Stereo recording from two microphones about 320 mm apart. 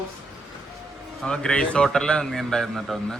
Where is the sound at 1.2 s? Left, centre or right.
Centre.